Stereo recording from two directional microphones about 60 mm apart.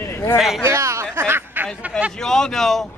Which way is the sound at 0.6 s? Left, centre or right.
Right.